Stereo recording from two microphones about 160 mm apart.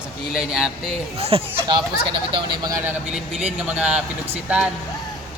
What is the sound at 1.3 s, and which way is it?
Speech, 35° right (ahead or behind).